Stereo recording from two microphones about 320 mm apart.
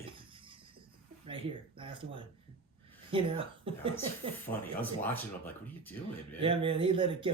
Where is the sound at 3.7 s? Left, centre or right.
Centre.